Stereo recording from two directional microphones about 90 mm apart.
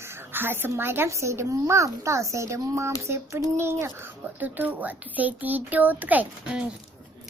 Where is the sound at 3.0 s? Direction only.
30° right (ahead or behind).